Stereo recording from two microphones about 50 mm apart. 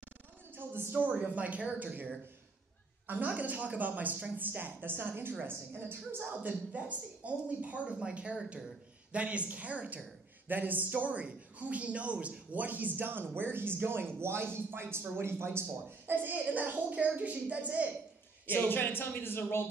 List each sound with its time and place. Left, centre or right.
0.9 s a man's voice: right
10.5 s a man's voice: right
16.1 s a man's voice: right
18.7 s speech: left